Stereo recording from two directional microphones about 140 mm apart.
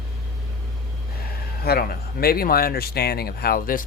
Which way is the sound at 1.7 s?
90° left.